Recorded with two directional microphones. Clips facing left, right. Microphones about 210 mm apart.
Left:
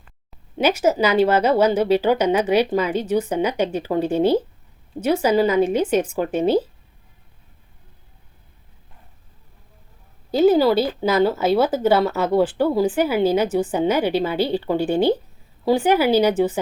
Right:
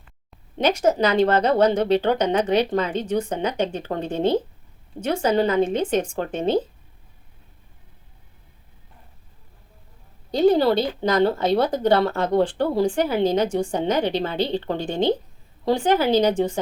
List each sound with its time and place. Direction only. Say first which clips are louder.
0.3 s speech: left 2 dB; 5° left (ahead or behind)
10.3 s speech: left 2 dB; 5° left (ahead or behind)